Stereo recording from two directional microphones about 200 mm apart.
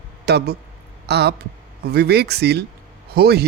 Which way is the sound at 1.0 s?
55° right (ahead or behind).